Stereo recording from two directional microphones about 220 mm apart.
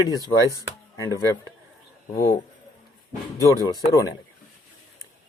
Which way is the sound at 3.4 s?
15° left (ahead or behind).